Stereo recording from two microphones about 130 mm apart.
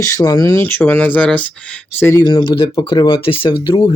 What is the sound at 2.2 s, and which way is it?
Speech, 35° left (ahead or behind).